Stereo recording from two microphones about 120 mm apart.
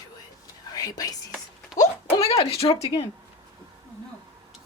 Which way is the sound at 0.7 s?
30° left (ahead or behind).